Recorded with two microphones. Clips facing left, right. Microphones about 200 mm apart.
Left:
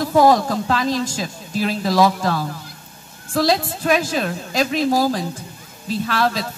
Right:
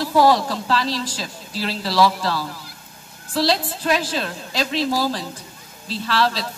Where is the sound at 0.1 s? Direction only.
20° left (ahead or behind).